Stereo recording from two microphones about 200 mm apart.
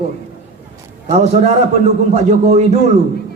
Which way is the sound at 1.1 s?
35° right (ahead or behind).